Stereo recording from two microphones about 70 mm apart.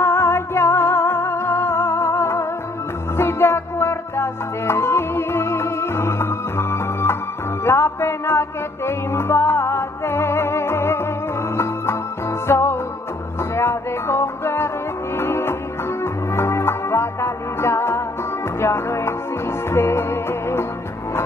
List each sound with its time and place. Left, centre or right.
0.0 s music: left